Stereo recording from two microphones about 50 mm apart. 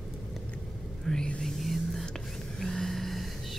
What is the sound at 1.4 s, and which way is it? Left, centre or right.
Music, centre.